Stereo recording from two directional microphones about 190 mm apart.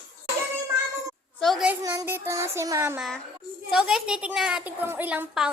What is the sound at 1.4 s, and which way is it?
Speech, centre (ahead or behind).